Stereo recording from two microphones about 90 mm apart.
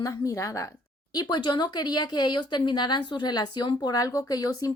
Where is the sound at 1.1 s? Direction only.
50° left (ahead or behind).